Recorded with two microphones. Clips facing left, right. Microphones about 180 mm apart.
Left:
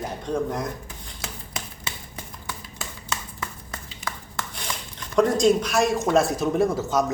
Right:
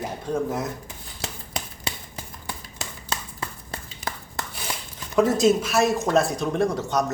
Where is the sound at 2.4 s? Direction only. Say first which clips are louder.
Even; 30° right (ahead or behind).